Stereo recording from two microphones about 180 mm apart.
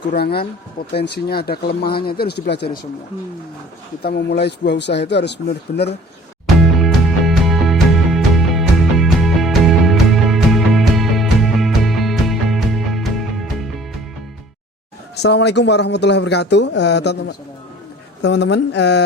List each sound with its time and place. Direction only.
0.2 s speech: 60° left (ahead or behind)
4.0 s speech: 65° left (ahead or behind)
6.6 s music: centre (ahead or behind)
15.1 s speech: 70° left (ahead or behind)